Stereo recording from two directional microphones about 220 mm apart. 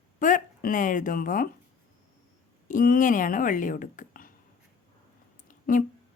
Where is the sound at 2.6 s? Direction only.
40° left (ahead or behind).